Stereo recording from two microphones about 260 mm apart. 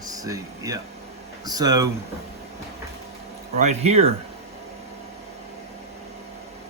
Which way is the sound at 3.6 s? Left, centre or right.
Right.